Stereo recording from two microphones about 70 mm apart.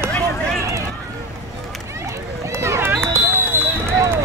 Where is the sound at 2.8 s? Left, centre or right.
Right.